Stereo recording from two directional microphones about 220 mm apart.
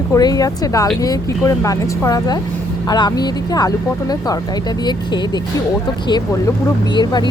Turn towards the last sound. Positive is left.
turn(degrees=20)  # may be behind; listen again after turning